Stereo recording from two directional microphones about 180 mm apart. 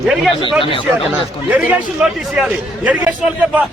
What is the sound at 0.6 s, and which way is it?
Speech, 30° left (ahead or behind).